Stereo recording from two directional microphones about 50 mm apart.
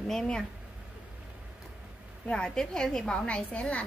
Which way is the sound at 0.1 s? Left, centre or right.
Centre.